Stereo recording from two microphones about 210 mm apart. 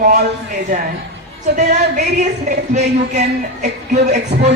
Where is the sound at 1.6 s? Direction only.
35° right (ahead or behind).